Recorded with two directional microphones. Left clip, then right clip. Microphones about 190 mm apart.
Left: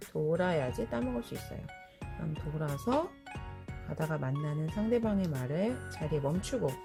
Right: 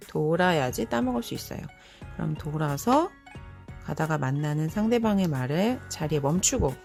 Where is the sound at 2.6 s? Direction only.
30° right (ahead or behind).